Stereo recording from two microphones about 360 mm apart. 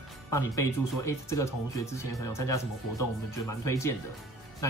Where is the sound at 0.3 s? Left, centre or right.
Centre.